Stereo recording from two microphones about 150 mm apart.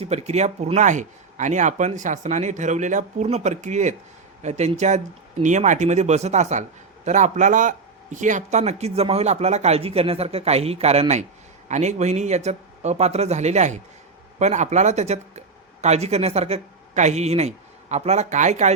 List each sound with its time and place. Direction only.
0.0 s a man's voice: 45° right (ahead or behind)